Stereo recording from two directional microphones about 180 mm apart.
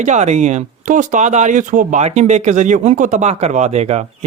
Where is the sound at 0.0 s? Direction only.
40° right (ahead or behind).